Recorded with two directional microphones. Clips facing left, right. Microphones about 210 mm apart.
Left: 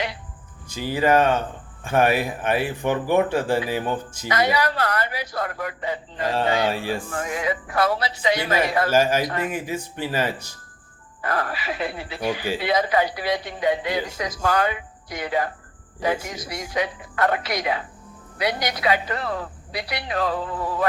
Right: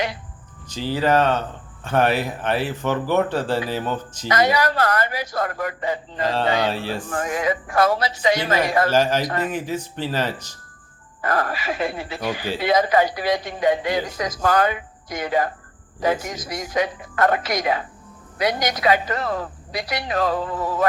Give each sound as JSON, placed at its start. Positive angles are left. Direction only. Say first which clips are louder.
{"t": 0.7, "sound": "speech", "louder": "even", "side_deg": 10}
{"t": 4.3, "sound": "a man's voice", "louder": "right 2 dB", "side_deg": -45}
{"t": 6.7, "sound": "speech", "louder": "even", "side_deg": 10}
{"t": 7.1, "sound": "a man's voice", "louder": "right 3 dB", "side_deg": -50}
{"t": 8.9, "sound": "speech", "louder": "even", "side_deg": 10}
{"t": 11.2, "sound": "a man's voice", "louder": "right 3 dB", "side_deg": -45}